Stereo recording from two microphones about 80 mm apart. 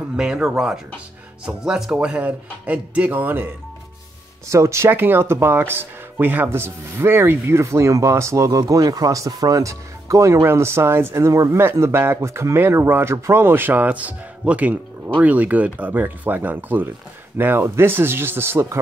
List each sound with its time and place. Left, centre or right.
0.1 s speech: centre; by 3.4 s right
4.5 s speech: right